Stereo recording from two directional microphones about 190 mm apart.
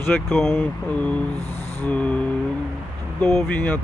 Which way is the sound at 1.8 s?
5° left (ahead or behind).